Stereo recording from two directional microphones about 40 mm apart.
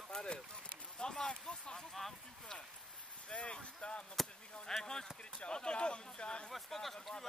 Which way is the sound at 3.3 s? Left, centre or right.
Left.